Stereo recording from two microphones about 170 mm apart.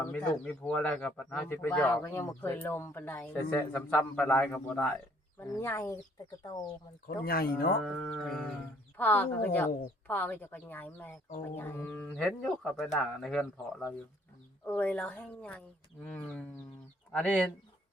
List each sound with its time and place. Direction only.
0.0 s speech: 10° left (ahead or behind)
7.3 s speech: 60° left (ahead or behind)
7.8 s speech: 5° left (ahead or behind)